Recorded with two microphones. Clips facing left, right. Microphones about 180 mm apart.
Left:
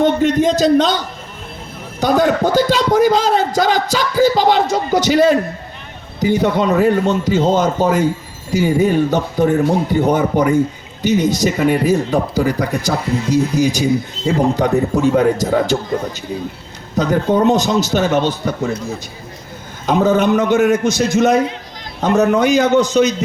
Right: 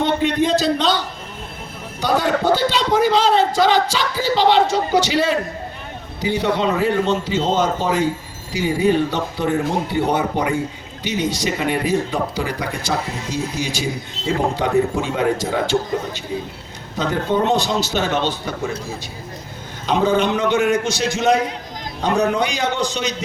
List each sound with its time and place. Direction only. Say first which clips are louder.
0.0 s a man's voice: left 5 dB; 45° left (ahead or behind)
14.5 s a man's voice: left 3 dB; 45° left (ahead or behind)
17.0 s a man's voice: left 5 dB; 40° left (ahead or behind)
19.9 s a man's voice: left 4 dB; 45° left (ahead or behind)